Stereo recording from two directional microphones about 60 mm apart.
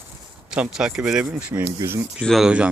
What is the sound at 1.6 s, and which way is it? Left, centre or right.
Speech, right.